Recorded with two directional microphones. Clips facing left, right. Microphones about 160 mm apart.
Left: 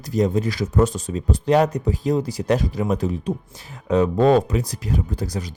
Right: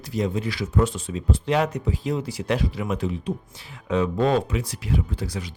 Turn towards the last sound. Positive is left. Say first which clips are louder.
# left 3 dB
turn(degrees=40)  # may be behind; listen again after turning